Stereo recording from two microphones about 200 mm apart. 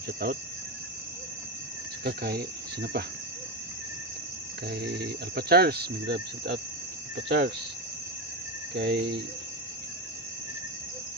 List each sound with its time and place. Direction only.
2.0 s speech: 50° right (ahead or behind)
4.7 s speech: 55° right (ahead or behind)
7.3 s cricket: 55° right (ahead or behind)
8.7 s cricket: 55° right (ahead or behind)